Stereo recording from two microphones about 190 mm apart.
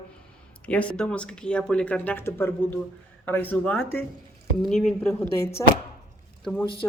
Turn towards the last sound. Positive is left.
turn(degrees=25)  # may be behind; listen again after turning